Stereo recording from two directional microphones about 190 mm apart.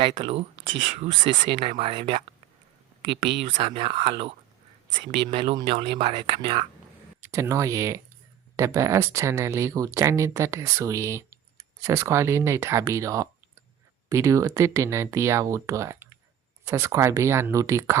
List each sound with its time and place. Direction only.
0.0 s speech: 30° right (ahead or behind)
3.5 s speech: 30° right (ahead or behind)